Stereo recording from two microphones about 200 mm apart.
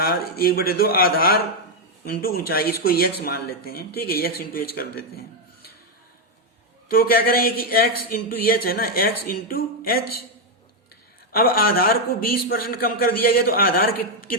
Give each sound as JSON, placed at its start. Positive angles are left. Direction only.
{"t": 0.0, "sound": "speech", "side_deg": 50}
{"t": 6.8, "sound": "speech", "side_deg": 45}
{"t": 11.3, "sound": "speech", "side_deg": 45}